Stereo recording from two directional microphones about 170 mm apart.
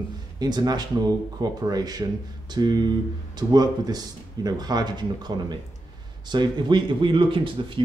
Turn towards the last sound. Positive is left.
turn(degrees=-30)  # may be behind; listen again after turning